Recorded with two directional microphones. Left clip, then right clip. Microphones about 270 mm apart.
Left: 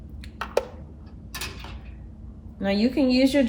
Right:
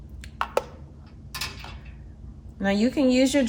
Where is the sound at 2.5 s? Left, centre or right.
Right.